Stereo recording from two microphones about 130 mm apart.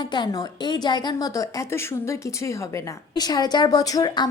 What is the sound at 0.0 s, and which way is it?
A woman's voice, 35° left (ahead or behind).